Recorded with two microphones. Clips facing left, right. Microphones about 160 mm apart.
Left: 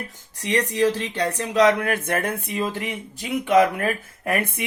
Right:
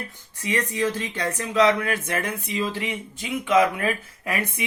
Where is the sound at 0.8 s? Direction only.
35° left (ahead or behind).